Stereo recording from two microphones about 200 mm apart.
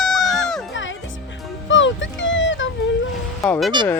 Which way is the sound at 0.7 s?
70° left (ahead or behind).